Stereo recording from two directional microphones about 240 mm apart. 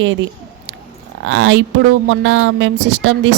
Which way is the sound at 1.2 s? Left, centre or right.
Right.